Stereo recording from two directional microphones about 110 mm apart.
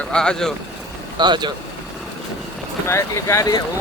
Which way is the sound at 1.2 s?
40° right (ahead or behind).